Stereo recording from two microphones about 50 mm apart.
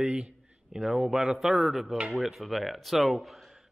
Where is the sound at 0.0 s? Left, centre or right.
Centre.